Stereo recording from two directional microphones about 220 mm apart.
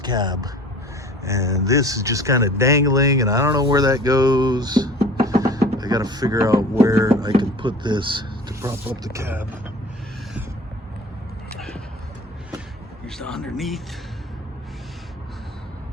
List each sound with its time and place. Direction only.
0.0 s speech: 20° right (ahead or behind)
11.5 s a sound: 5° left (ahead or behind)
13.1 s speech: centre (ahead or behind)